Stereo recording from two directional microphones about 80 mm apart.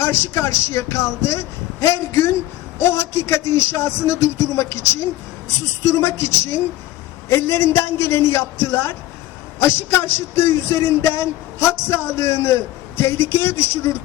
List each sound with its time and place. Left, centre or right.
0.0 s a man's voice: left
5.9 s a man's voice: left